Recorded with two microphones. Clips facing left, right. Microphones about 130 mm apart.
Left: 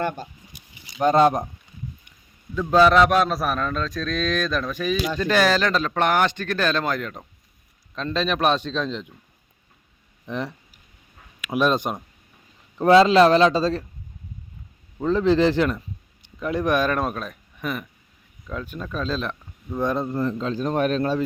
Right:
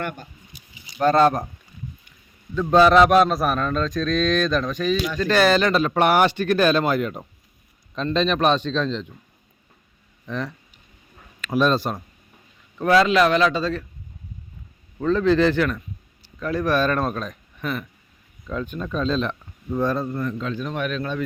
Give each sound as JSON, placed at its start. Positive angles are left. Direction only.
{"t": 0.0, "sound": "a man's voice", "side_deg": 30}
{"t": 0.9, "sound": "a man's voice", "side_deg": 15}
{"t": 2.6, "sound": "speech", "side_deg": 0}
{"t": 7.9, "sound": "a man's voice", "side_deg": 5}
{"t": 10.2, "sound": "a man's voice", "side_deg": 20}
{"t": 11.3, "sound": "speech", "side_deg": 10}
{"t": 12.7, "sound": "a man's voice", "side_deg": 30}
{"t": 14.9, "sound": "a man's voice", "side_deg": 20}
{"t": 19.8, "sound": "a man's voice", "side_deg": 20}